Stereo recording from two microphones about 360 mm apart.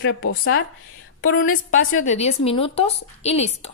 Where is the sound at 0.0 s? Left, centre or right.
Left.